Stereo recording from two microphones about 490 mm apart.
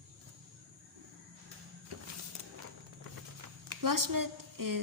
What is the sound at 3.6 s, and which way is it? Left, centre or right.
Speech, right.